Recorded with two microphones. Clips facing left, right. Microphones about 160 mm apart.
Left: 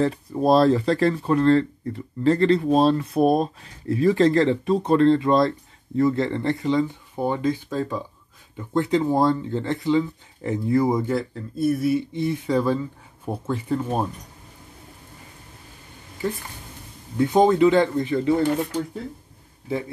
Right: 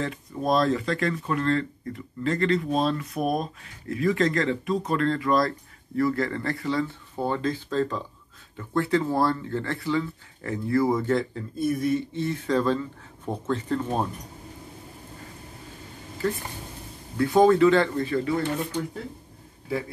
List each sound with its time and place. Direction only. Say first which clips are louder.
0.0 s speech: left 7 dB; 35° left (ahead or behind); by 11.1 s 15° left (ahead or behind)
11.1 s speech: left 1 dB; centre (ahead or behind)
17.2 s speech: left 1 dB; 20° left (ahead or behind)